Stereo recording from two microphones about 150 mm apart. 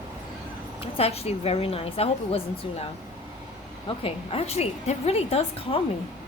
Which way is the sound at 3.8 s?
40° left (ahead or behind).